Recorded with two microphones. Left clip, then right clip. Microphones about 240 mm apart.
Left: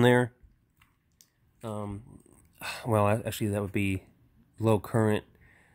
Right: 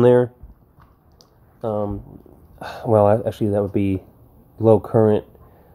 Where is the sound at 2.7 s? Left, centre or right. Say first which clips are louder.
Right 11 dB; left.